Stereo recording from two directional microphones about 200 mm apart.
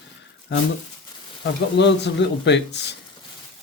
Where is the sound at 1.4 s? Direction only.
60° left (ahead or behind).